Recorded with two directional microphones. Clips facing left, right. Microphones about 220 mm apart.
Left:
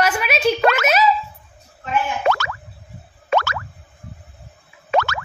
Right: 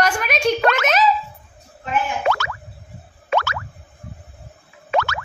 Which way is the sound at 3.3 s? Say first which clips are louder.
Left 2 dB; 40° left (ahead or behind).